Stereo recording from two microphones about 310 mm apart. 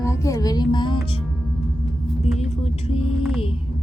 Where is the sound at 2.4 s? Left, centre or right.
Left.